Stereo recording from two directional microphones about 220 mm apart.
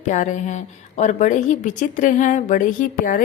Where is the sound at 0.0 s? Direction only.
35° left (ahead or behind).